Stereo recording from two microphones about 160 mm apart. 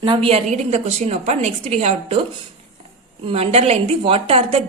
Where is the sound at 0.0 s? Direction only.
30° right (ahead or behind).